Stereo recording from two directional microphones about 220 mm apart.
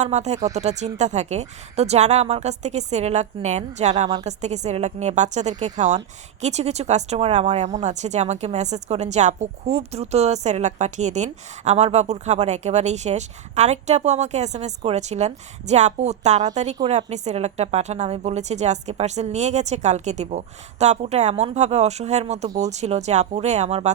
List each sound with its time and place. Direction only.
0.0 s speech: 30° right (ahead or behind)